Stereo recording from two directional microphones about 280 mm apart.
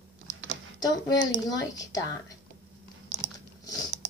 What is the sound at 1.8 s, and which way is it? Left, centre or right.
Speech, centre.